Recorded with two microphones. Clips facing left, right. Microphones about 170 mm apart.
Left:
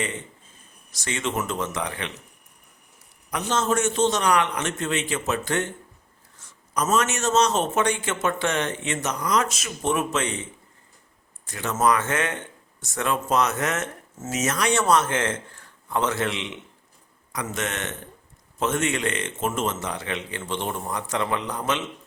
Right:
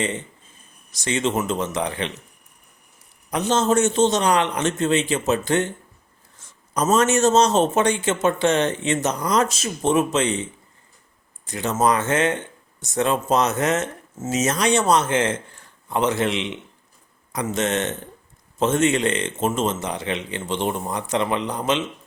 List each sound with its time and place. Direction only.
0.9 s a man's voice: 20° right (ahead or behind)
3.2 s a man's voice: 25° right (ahead or behind)
6.7 s a man's voice: 35° right (ahead or behind)
11.4 s a man's voice: 20° right (ahead or behind)